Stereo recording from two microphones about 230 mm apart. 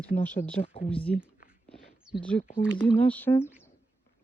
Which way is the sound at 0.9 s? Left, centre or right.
Centre.